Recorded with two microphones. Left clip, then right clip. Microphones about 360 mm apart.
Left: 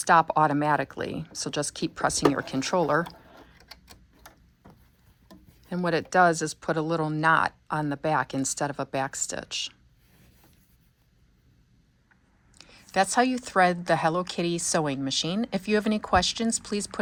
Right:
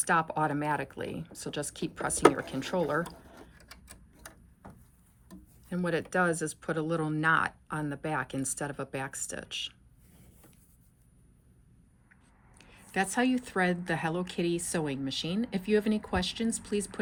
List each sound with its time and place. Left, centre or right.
0.0 s speech: centre
5.3 s speech: centre
12.5 s speech: centre